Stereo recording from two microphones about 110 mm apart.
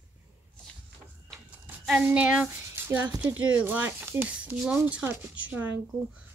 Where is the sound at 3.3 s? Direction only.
15° right (ahead or behind).